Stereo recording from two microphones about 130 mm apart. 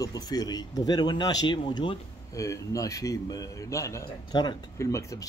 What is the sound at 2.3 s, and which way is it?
A man's voice, 25° left (ahead or behind).